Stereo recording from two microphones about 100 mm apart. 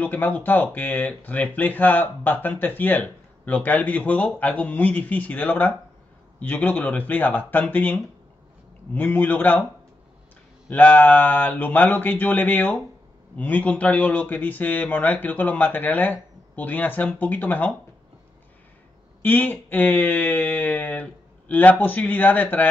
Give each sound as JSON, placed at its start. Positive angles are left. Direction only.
{"t": 0.0, "sound": "speech", "side_deg": 20}
{"t": 10.7, "sound": "speech", "side_deg": 15}
{"t": 19.2, "sound": "speech", "side_deg": 20}